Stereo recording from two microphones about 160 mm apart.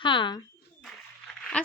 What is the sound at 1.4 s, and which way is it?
Dog, 5° left (ahead or behind).